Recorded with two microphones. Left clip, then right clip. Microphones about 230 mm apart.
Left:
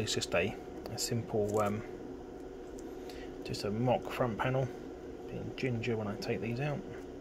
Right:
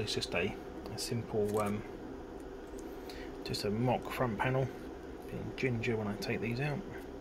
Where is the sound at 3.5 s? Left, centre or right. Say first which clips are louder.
Left 1 dB; centre.